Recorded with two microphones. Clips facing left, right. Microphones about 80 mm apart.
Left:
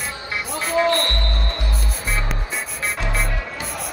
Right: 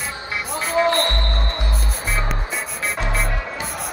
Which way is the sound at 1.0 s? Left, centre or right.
Right.